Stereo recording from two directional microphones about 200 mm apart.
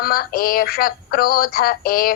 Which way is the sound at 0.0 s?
45° left (ahead or behind).